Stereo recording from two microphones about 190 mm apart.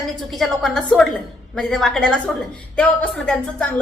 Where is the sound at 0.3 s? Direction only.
Centre (ahead or behind).